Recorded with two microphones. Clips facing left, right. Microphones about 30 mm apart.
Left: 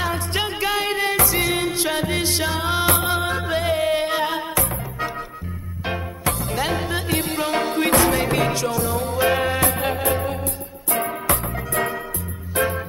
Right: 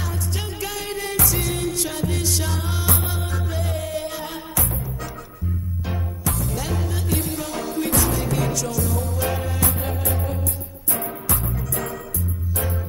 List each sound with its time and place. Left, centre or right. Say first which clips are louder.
0.0 s music: left 7 dB; left
6.4 s music: left 5 dB; left